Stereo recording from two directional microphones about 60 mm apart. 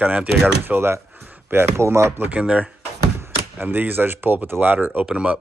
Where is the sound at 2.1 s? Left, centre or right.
Right.